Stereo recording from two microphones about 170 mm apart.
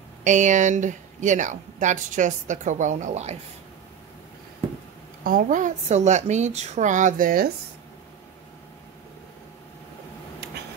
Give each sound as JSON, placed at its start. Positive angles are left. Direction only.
{"t": 0.2, "sound": "speech", "side_deg": -45}
{"t": 5.2, "sound": "speech", "side_deg": -55}